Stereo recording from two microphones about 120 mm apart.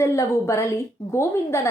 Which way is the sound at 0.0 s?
25° left (ahead or behind).